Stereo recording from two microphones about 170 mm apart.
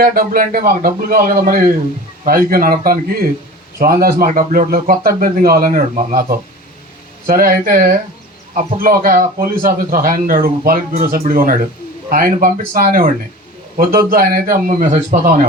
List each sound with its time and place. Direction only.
0.0 s a man's voice: 60° right (ahead or behind)
7.3 s a man's voice: 55° right (ahead or behind)